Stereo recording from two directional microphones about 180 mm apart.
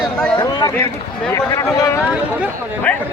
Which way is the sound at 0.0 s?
5° left (ahead or behind).